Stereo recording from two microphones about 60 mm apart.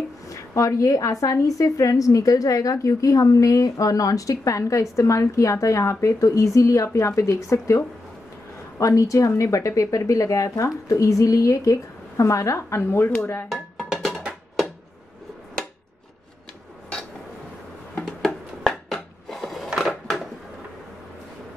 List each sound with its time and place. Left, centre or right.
0.3 s a woman's voice: left
8.7 s a woman's voice: left
13.5 s music: centre
18.0 s a sound: centre